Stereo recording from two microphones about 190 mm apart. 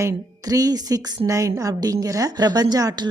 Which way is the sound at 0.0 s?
20° right (ahead or behind).